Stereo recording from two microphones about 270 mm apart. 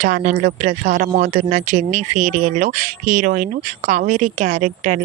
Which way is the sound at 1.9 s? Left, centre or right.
Right.